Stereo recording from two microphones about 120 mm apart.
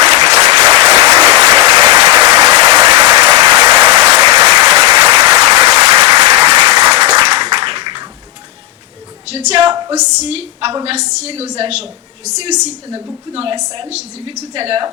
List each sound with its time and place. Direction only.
0.1 s applause: 60° right (ahead or behind); by 5.2 s 40° right (ahead or behind)
5.6 s applause: 50° right (ahead or behind)
9.6 s a sound: 40° right (ahead or behind)
9.9 s a woman's voice: 70° right (ahead or behind)
13.3 s a woman's voice: 50° right (ahead or behind)